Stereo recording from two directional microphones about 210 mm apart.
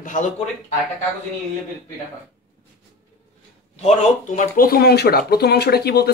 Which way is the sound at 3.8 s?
35° left (ahead or behind).